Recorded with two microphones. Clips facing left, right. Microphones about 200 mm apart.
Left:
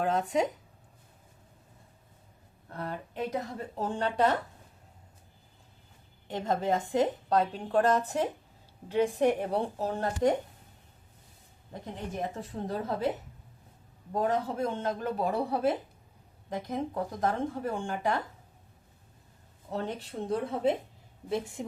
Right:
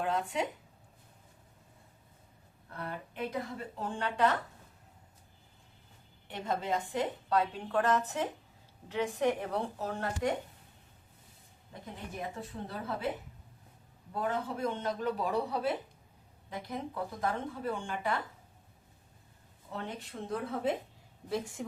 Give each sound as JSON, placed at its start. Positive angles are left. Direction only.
{"t": 0.0, "sound": "a woman's voice", "side_deg": 40}
{"t": 2.6, "sound": "a woman's voice", "side_deg": 40}
{"t": 6.4, "sound": "a woman's voice", "side_deg": 45}
{"t": 12.3, "sound": "a woman's voice", "side_deg": 40}
{"t": 14.1, "sound": "speech", "side_deg": 40}
{"t": 19.7, "sound": "a woman's voice", "side_deg": 40}